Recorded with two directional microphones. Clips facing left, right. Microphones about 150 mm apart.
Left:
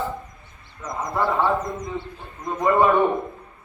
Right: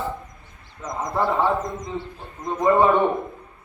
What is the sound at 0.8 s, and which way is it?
A man's voice, 20° right (ahead or behind).